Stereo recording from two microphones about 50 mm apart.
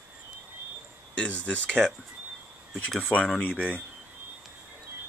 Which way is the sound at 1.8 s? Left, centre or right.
Centre.